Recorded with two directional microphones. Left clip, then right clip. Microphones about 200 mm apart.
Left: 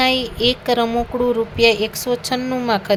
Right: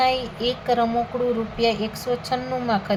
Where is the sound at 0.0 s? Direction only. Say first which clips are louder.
Left 4 dB; 40° left (ahead or behind).